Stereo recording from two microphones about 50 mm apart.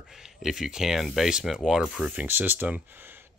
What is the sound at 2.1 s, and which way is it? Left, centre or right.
Speech, right.